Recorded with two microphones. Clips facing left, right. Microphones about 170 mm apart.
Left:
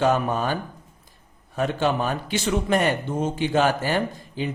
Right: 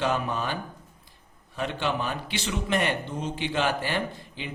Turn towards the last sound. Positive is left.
turn(degrees=40)  # may be behind; listen again after turning